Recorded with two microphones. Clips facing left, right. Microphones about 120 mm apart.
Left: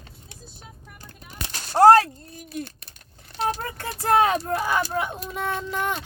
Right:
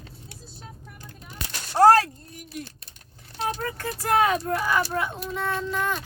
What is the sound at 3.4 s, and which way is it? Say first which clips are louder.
Speech: left 1 dB; 30° left (ahead or behind).